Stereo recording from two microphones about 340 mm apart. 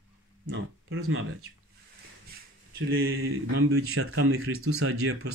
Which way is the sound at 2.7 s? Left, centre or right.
Right.